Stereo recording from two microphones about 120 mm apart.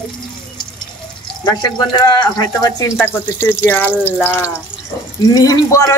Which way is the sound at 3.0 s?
15° left (ahead or behind).